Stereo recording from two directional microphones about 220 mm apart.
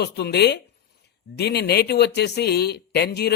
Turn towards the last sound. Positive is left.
turn(degrees=50)  # may be behind; listen again after turning